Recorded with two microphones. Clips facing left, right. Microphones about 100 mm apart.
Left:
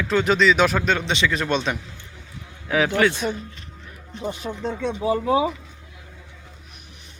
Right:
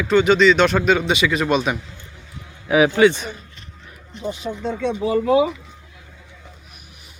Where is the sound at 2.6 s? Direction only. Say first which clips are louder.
Right 6 dB; 15° right (ahead or behind).